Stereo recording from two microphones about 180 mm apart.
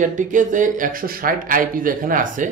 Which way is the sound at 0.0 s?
45° right (ahead or behind).